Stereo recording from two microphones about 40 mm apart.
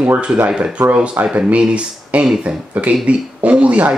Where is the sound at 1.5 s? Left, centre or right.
Right.